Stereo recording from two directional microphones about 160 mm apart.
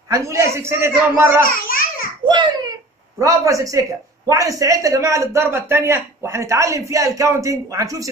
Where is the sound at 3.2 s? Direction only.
20° right (ahead or behind).